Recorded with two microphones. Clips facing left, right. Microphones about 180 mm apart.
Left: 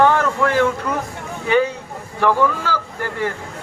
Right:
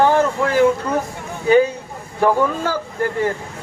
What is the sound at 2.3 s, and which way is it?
Speech, 50° right (ahead or behind).